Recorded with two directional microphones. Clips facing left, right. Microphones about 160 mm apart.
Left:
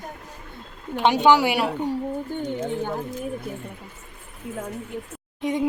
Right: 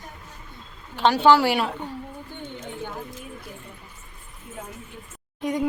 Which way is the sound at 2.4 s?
50° left (ahead or behind).